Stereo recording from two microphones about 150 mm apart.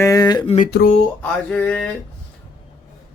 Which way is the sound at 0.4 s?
50° left (ahead or behind).